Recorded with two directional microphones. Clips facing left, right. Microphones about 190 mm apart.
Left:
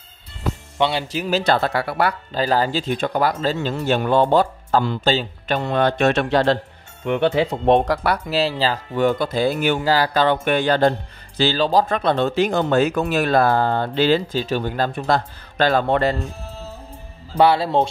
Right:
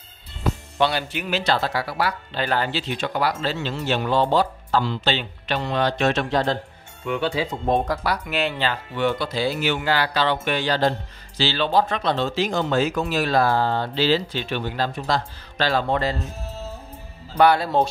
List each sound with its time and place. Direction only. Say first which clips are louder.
0.7 s speech: left 2 dB; 20° left (ahead or behind)
1.1 s speech: left 5 dB; 35° left (ahead or behind)
1.4 s speech: left 2 dB; 55° left (ahead or behind)
2.3 s speech: left 4 dB; 35° left (ahead or behind); by 6.6 s 75° left (ahead or behind)
7.1 s speech: left 5 dB; 60° left (ahead or behind)
8.3 s speech: left 5 dB; 35° left (ahead or behind); by 9.8 s 50° left (ahead or behind)
9.8 s speech: left 4 dB; 40° left (ahead or behind)
11.5 s speech: left 2 dB; 40° left (ahead or behind); by 16.2 s 60° left (ahead or behind)
17.4 s speech: left 2 dB; 25° left (ahead or behind)